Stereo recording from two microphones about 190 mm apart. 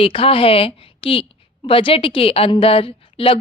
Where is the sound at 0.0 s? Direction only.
30° left (ahead or behind).